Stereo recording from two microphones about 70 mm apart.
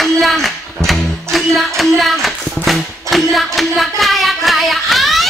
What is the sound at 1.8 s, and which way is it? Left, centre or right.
Hands, centre.